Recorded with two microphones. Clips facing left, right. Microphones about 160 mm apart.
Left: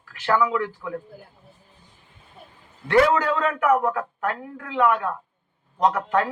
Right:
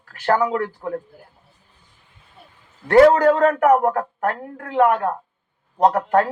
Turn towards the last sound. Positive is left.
turn(degrees=-45)  # may be behind; listen again after turning